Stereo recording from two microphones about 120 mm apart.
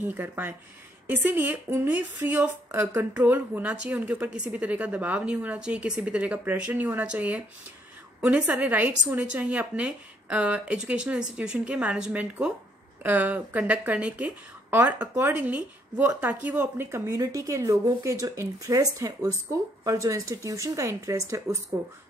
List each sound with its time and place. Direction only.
0.0 s a woman's voice: 15° right (ahead or behind)